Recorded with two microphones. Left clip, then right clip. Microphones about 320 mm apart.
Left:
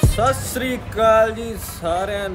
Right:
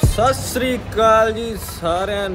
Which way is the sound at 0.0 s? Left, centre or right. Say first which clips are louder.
Right 2 dB; centre.